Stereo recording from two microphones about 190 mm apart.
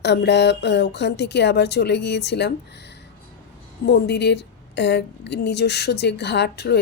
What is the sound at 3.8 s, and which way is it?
Speech, 60° left (ahead or behind).